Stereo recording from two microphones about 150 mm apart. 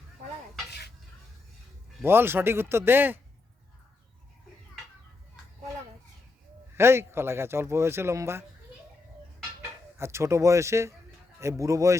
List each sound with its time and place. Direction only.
2.0 s speech: 15° right (ahead or behind)
6.7 s speech: 15° right (ahead or behind)
9.6 s speech: 15° right (ahead or behind)